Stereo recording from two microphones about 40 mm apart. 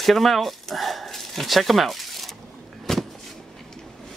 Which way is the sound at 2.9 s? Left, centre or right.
Centre.